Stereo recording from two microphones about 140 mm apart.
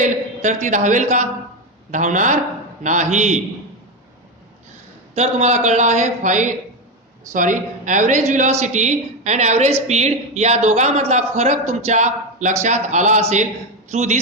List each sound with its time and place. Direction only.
0.0 s a man's voice: 60° right (ahead or behind)
5.1 s a woman's voice: 50° right (ahead or behind)